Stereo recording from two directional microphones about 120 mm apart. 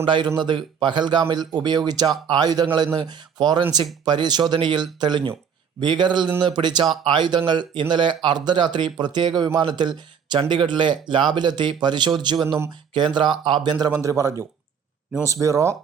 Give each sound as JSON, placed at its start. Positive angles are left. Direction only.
{"t": 0.0, "sound": "a man's voice", "side_deg": -45}